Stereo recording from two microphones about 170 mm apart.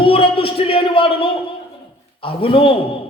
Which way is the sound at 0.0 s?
30° left (ahead or behind).